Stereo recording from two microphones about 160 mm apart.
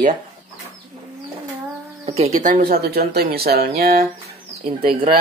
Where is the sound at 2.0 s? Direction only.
40° right (ahead or behind); by 4.0 s 75° right (ahead or behind).